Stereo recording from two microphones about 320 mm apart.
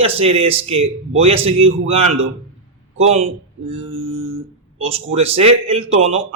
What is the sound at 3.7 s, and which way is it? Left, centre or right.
Mantra, centre.